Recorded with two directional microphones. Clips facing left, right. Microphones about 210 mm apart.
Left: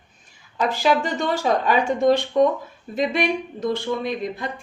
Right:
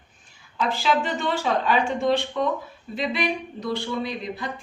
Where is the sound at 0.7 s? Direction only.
40° left (ahead or behind).